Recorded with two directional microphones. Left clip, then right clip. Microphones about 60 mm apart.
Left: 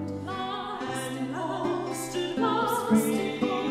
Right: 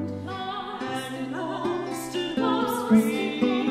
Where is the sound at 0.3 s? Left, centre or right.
Right.